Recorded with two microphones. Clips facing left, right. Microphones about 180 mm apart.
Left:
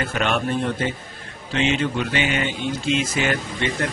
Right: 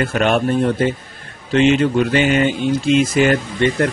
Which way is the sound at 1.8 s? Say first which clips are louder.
Right 8 dB; 45° right (ahead or behind).